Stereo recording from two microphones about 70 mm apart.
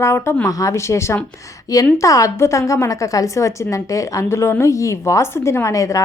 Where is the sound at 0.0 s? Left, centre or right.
Left.